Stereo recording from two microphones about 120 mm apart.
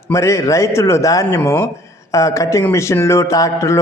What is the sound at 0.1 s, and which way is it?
A man's voice, 25° left (ahead or behind).